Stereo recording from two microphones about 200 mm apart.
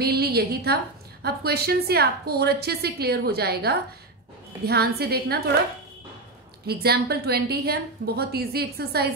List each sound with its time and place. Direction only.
0.0 s a woman's voice: 50° right (ahead or behind)
6.6 s a woman's voice: 50° right (ahead or behind)